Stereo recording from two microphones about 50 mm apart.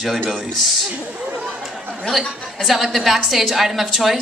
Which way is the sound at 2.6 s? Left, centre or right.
Centre.